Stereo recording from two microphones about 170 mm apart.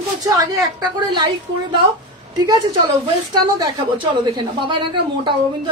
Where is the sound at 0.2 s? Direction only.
20° right (ahead or behind).